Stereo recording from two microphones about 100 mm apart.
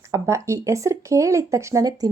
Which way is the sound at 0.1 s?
30° right (ahead or behind).